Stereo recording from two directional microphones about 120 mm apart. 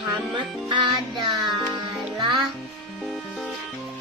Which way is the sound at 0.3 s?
40° right (ahead or behind).